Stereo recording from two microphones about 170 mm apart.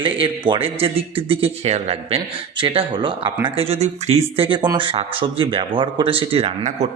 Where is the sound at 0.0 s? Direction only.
30° right (ahead or behind).